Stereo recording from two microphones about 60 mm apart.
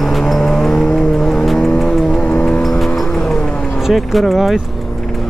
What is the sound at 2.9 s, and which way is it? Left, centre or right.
Music, centre.